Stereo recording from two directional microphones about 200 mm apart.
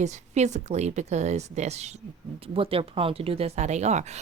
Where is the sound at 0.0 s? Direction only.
35° right (ahead or behind).